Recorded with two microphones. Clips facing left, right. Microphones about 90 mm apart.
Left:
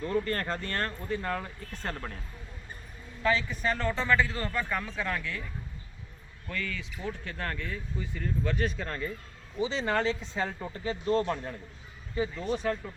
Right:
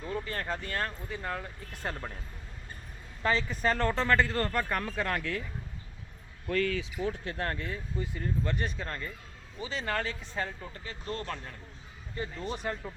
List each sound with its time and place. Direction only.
0.0 s speech: 5° right (ahead or behind)
3.2 s speech: 40° right (ahead or behind)
6.5 s speech: 55° right (ahead or behind)
7.3 s speech: 35° right (ahead or behind)
8.0 s speech: 10° right (ahead or behind)
9.6 s a man's voice: 20° left (ahead or behind)
12.5 s speech: 5° right (ahead or behind)